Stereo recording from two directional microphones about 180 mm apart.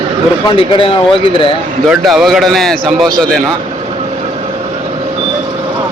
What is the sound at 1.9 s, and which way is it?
A man's voice, centre (ahead or behind).